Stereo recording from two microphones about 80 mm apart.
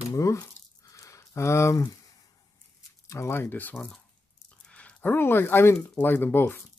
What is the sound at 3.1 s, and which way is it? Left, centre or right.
Speech, left.